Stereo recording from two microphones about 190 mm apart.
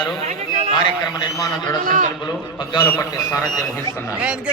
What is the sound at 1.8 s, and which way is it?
Speech, 40° right (ahead or behind).